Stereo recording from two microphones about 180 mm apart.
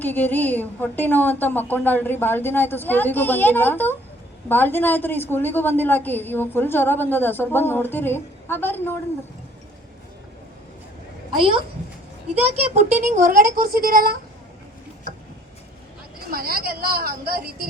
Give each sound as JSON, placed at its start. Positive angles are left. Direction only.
{"t": 0.0, "sound": "a woman's voice", "side_deg": 10}
{"t": 11.3, "sound": "speech", "side_deg": -30}
{"t": 16.3, "sound": "a woman's voice", "side_deg": -55}